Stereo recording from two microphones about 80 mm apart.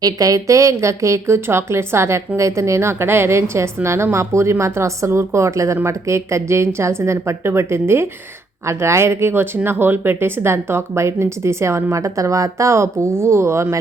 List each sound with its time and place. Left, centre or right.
0.0 s a woman's voice: right